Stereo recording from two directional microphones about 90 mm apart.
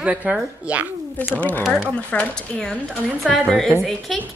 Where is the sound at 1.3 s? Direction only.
20° left (ahead or behind).